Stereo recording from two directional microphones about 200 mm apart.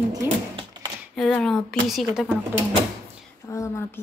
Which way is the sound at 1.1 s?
5° left (ahead or behind).